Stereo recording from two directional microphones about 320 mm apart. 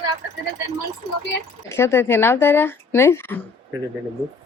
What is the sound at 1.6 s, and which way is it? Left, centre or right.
A woman's voice, centre.